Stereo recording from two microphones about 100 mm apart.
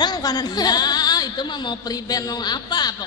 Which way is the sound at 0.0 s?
45° left (ahead or behind).